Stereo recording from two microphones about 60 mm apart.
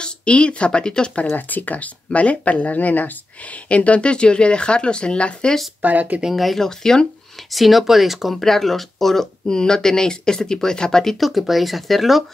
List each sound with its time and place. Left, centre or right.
0.0 s speech: centre
1.3 s speech: left
5.8 s speech: right
6.2 s speech: centre
7.5 s speech: centre